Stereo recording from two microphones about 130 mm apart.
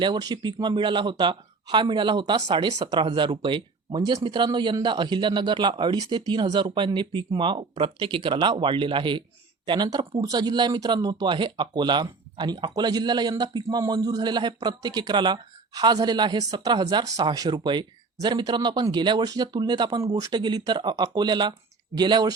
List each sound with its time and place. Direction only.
0.0 s speech: 35° right (ahead or behind)